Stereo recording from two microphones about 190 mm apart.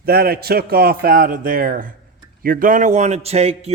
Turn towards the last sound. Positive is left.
turn(degrees=-30)  # may be behind; listen again after turning